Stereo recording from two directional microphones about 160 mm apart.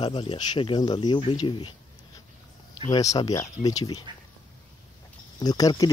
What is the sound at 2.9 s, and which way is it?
Speech, 20° left (ahead or behind).